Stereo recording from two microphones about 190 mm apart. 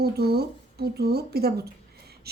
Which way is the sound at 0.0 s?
55° right (ahead or behind).